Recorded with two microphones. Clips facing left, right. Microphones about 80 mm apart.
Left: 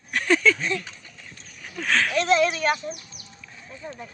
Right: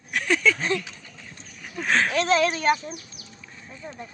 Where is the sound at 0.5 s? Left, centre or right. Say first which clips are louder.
Right 2 dB; right.